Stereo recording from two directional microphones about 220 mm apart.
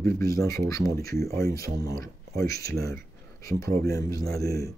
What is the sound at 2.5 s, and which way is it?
Speech, 45° right (ahead or behind).